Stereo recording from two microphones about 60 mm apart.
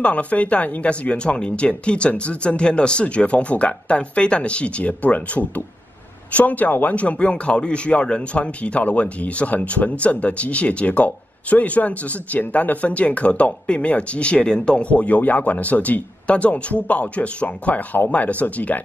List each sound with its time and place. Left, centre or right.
0.0 s speech: left